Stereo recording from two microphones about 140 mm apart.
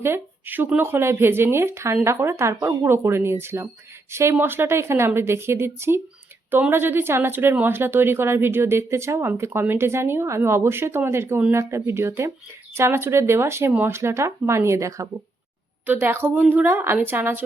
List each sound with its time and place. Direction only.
0.0 s a woman's voice: 15° right (ahead or behind)